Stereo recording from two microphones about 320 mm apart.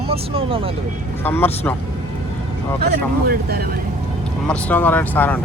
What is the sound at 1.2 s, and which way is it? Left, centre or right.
Speech, centre.